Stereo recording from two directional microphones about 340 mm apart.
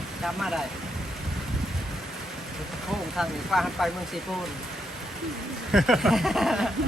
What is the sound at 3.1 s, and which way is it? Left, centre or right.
Speech, centre.